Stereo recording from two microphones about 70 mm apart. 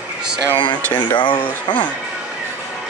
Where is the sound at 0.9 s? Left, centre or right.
Left.